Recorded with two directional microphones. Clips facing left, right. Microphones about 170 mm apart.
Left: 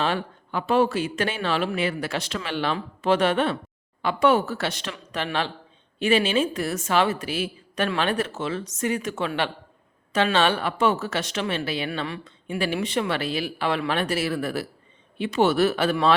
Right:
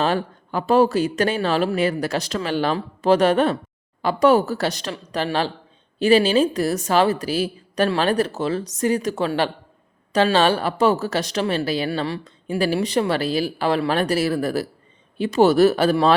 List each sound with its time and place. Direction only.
0.0 s a woman's voice: 40° right (ahead or behind)